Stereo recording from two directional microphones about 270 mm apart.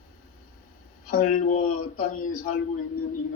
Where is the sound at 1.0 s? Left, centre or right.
Left.